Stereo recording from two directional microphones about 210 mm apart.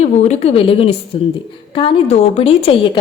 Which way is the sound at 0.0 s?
30° left (ahead or behind).